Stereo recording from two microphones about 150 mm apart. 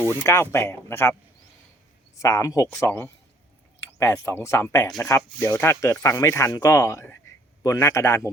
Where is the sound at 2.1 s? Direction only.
20° left (ahead or behind).